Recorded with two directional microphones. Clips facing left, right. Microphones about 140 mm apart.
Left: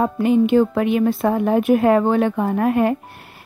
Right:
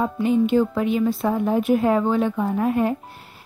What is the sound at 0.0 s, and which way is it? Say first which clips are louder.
Speech: left 3 dB; 65° left (ahead or behind).